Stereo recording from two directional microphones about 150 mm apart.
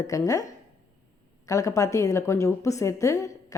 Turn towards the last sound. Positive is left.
turn(degrees=20)  # may be behind; listen again after turning